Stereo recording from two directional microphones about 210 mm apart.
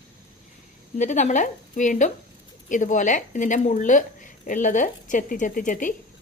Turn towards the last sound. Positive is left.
turn(degrees=40)  # may be behind; listen again after turning